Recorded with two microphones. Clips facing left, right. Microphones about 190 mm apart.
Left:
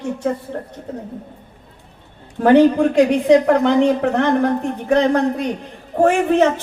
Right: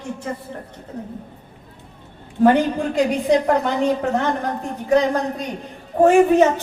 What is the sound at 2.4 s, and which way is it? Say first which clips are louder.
A woman's voice: left 5 dB; 70° left (ahead or behind).